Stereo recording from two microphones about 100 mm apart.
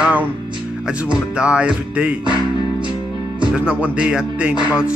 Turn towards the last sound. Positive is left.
turn(degrees=-10)  # may be behind; listen again after turning